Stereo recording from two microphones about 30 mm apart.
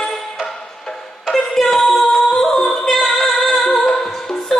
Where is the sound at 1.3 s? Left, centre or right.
Centre.